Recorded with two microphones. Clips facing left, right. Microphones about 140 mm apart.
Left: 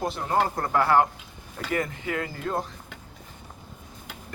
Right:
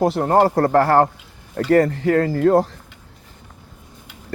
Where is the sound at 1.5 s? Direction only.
75° right (ahead or behind).